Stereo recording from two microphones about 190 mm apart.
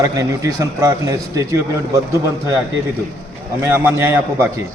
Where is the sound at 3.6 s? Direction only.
10° right (ahead or behind).